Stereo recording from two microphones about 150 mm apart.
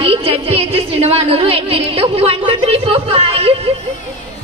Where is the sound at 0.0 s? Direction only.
40° right (ahead or behind).